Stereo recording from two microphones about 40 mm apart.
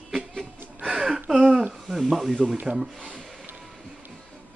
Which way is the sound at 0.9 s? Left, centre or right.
Centre.